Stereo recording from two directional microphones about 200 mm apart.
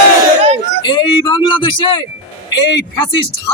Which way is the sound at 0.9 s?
25° left (ahead or behind).